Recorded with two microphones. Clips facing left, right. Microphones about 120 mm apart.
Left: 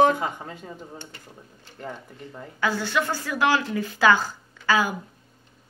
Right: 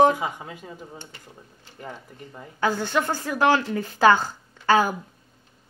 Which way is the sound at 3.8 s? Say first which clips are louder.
Right 2 dB; 25° right (ahead or behind).